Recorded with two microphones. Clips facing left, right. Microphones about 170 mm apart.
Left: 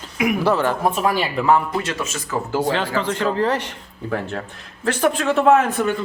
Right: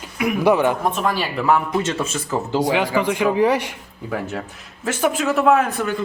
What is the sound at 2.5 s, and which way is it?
A man's voice, 15° right (ahead or behind).